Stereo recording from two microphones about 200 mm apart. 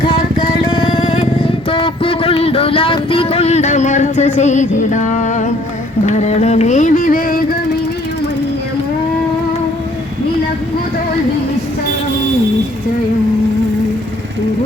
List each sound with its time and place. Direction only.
0.0 s music: 25° left (ahead or behind)
1.7 s child singing: 25° left (ahead or behind)
6.1 s carnatic music: 35° left (ahead or behind)